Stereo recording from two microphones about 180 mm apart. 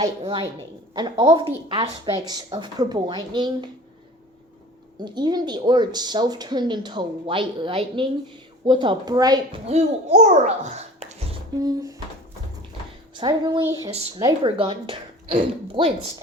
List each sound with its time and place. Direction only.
0.0 s a woman's voice: 25° right (ahead or behind)
5.0 s a woman's voice: 25° right (ahead or behind)
9.6 s a child's voice: 40° right (ahead or behind)
11.6 s a woman's voice: 20° right (ahead or behind)
13.1 s a woman's voice: 25° right (ahead or behind)